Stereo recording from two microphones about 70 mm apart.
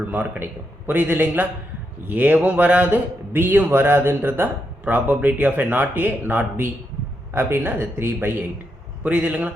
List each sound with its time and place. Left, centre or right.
0.1 s a man's voice: right